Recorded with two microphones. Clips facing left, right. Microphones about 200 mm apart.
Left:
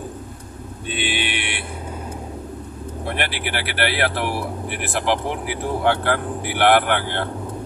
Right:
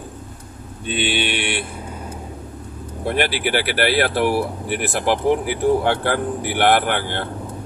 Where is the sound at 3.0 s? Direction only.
40° right (ahead or behind).